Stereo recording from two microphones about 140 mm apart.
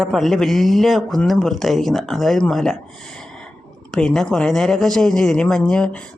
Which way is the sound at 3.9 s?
5° left (ahead or behind).